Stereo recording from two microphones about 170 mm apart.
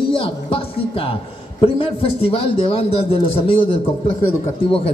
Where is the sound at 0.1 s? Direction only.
35° left (ahead or behind).